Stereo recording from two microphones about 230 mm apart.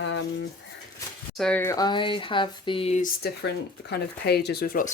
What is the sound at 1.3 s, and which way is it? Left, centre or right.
Speech, centre.